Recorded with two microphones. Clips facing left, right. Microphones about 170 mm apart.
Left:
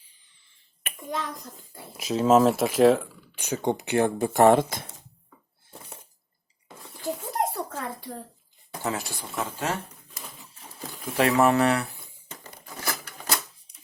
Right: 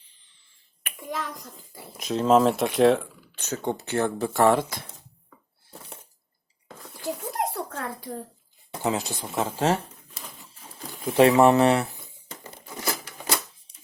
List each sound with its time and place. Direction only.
1.1 s a child's voice: centre (ahead or behind)
3.3 s speech: 10° left (ahead or behind)
6.7 s a sound: centre (ahead or behind)
8.8 s speech: 20° right (ahead or behind)
11.0 s speech: 20° right (ahead or behind)
12.6 s a sound: 15° right (ahead or behind)